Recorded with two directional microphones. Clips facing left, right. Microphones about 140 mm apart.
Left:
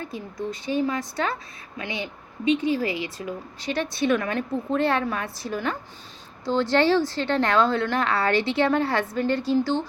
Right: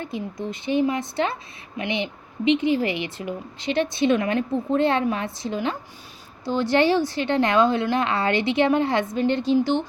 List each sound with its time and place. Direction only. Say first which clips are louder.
0.0 s a woman's voice: right 2 dB; 25° right (ahead or behind)